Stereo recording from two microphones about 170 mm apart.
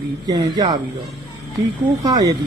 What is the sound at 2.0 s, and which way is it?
Speech, 25° right (ahead or behind).